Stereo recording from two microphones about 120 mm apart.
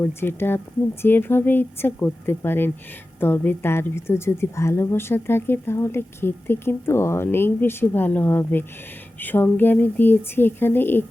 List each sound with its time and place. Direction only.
0.0 s a woman's voice: 20° left (ahead or behind)